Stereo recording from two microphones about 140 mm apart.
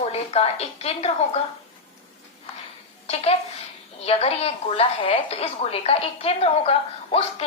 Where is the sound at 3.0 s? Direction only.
45° left (ahead or behind).